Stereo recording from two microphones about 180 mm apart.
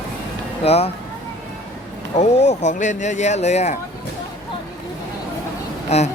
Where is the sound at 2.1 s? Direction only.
40° left (ahead or behind).